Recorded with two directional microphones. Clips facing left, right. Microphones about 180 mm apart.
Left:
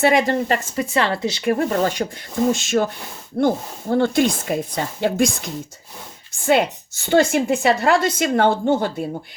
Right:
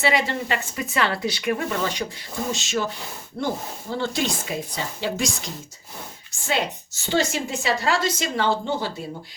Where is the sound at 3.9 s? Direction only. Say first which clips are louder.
Left 9 dB; 55° left (ahead or behind).